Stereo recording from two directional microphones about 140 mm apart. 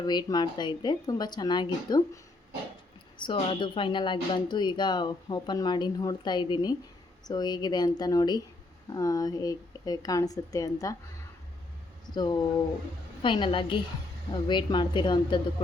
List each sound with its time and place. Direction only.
0.0 s a woman's voice: 30° left (ahead or behind)
3.2 s a woman's voice: 40° left (ahead or behind)
12.1 s a woman's voice: 30° left (ahead or behind)